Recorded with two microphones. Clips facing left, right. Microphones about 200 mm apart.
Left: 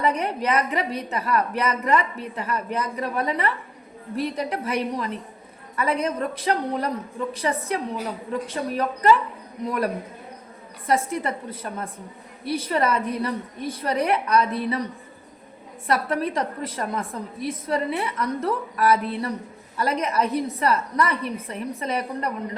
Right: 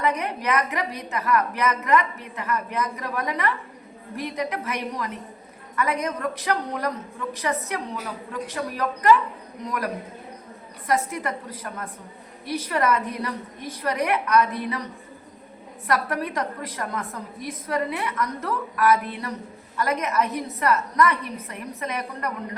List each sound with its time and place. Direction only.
0.0 s a woman's voice: 30° left (ahead or behind)
15.9 s a woman's voice: 30° left (ahead or behind)